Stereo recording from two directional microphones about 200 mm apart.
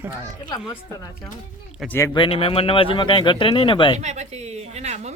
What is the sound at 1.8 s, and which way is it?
Speech, 10° left (ahead or behind).